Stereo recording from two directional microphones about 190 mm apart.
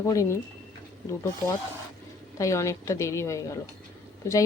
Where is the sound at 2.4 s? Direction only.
15° left (ahead or behind).